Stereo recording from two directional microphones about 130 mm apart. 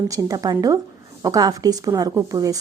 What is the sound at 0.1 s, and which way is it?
A woman's voice, 30° right (ahead or behind).